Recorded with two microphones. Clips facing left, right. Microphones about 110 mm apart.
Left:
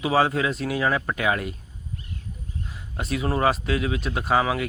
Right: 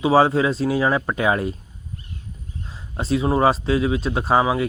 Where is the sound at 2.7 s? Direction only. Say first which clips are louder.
Right 7 dB; 30° right (ahead or behind).